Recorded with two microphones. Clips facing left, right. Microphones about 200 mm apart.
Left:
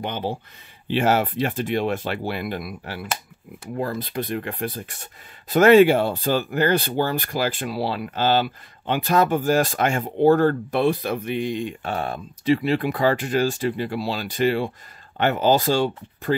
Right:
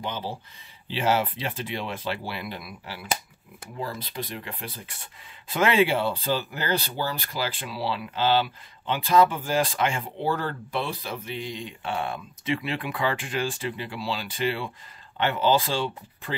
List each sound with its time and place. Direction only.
0.0 s speech: 55° left (ahead or behind)